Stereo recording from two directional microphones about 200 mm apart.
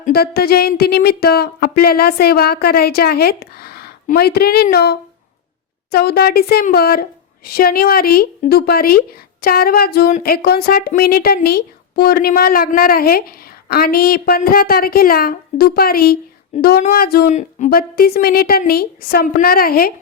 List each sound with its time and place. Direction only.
0.0 s speech: 50° left (ahead or behind)